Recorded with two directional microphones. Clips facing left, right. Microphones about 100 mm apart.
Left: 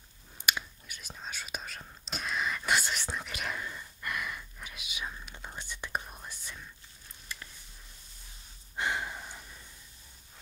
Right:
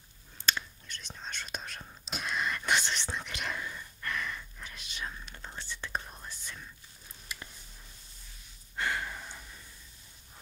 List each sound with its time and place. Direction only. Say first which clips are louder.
0.4 s whispering: even; 15° left (ahead or behind)
8.7 s breathing: left 1 dB; 20° left (ahead or behind)